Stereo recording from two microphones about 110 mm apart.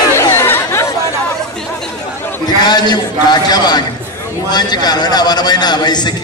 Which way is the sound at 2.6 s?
40° left (ahead or behind).